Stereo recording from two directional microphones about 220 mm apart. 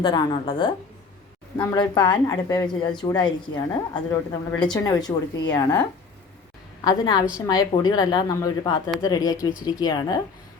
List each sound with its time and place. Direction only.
0.0 s speech: 20° left (ahead or behind)
6.8 s speech: 20° left (ahead or behind)